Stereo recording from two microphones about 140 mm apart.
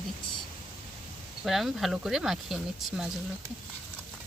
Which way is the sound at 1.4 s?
Centre (ahead or behind).